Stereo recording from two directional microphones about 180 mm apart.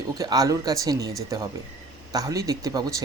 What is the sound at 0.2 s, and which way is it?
Speech, 20° right (ahead or behind).